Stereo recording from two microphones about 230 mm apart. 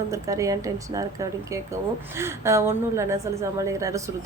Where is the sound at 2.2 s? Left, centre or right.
Centre.